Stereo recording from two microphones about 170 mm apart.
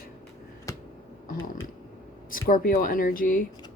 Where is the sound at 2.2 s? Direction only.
55° left (ahead or behind).